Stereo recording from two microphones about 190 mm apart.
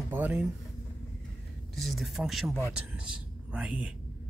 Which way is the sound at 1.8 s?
Centre (ahead or behind).